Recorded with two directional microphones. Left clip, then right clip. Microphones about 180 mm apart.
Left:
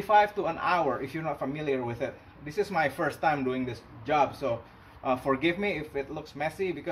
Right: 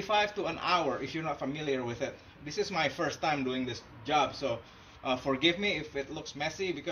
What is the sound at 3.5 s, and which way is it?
A man's voice, 5° right (ahead or behind).